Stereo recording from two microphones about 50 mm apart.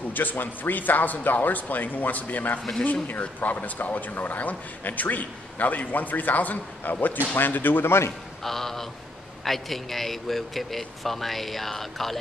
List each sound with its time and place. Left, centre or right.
0.1 s speech: left
8.5 s a man's voice: centre